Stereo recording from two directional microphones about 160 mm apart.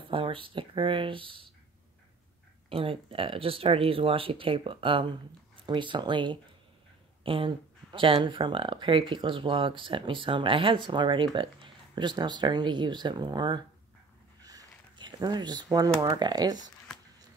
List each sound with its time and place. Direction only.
0.1 s speech: 35° right (ahead or behind)
2.7 s speech: 35° right (ahead or behind)
14.4 s a sound: 25° right (ahead or behind)
16.0 s speech: 25° right (ahead or behind)